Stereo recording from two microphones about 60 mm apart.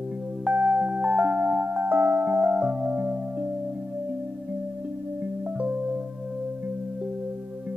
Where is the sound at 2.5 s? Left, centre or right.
Centre.